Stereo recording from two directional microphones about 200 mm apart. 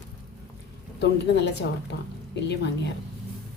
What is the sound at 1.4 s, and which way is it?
Speech, 60° left (ahead or behind).